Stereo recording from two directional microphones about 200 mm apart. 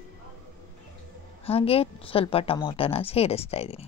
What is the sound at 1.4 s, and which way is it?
A woman's voice, 30° left (ahead or behind).